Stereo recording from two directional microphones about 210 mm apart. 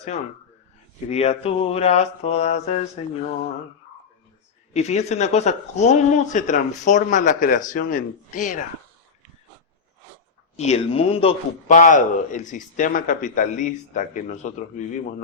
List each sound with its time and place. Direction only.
1.1 s a man's voice: 30° left (ahead or behind)
4.7 s a man's voice: 30° left (ahead or behind)
10.6 s a man's voice: 30° left (ahead or behind)